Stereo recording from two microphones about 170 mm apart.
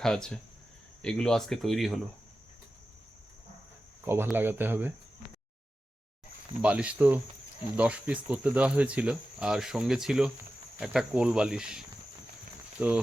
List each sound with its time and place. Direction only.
0.0 s speech: 5° left (ahead or behind)
4.0 s speech: 15° right (ahead or behind)
6.6 s speech: 5° right (ahead or behind)
12.8 s speech: 5° right (ahead or behind)